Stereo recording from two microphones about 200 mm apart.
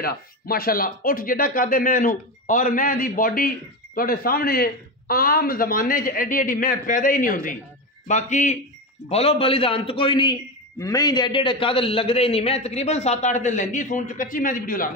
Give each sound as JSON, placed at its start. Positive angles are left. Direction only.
{"t": 0.0, "sound": "a man's voice", "side_deg": 50}